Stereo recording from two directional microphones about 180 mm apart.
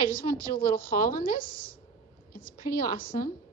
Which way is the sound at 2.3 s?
55° left (ahead or behind).